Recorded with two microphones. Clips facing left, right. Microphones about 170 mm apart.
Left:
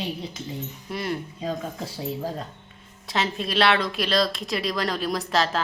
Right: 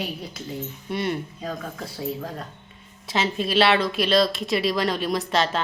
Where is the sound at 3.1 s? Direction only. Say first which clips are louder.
Right 2 dB; centre (ahead or behind).